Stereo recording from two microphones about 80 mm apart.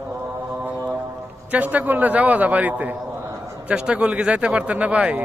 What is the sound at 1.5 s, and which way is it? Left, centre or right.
A man's voice, centre.